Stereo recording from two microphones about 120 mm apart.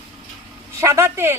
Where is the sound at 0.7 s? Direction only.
25° right (ahead or behind).